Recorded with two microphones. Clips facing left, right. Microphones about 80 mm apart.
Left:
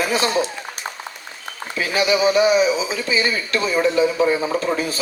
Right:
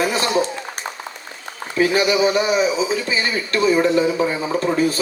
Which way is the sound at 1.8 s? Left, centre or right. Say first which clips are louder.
Right 2 dB; right.